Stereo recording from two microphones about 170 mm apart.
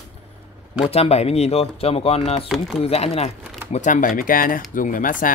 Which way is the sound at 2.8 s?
35° left (ahead or behind).